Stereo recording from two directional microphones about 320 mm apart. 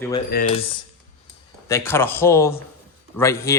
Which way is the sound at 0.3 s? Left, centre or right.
Left.